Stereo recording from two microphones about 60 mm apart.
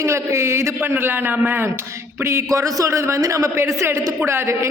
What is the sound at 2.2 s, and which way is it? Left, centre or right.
A man's voice, right.